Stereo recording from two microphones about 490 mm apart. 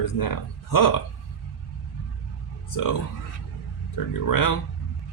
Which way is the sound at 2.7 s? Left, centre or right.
Left.